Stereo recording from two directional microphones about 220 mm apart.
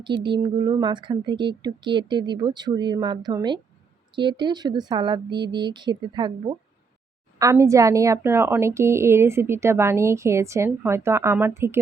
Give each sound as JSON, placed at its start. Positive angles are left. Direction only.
{"t": 0.0, "sound": "a woman's voice", "side_deg": -20}
{"t": 7.3, "sound": "a woman's voice", "side_deg": -15}